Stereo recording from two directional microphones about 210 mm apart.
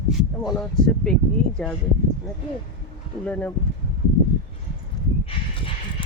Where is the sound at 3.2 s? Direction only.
5° left (ahead or behind).